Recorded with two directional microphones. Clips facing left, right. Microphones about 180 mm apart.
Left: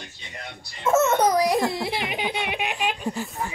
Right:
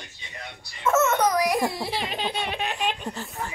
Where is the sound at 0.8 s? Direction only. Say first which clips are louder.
Left 2 dB; 35° left (ahead or behind).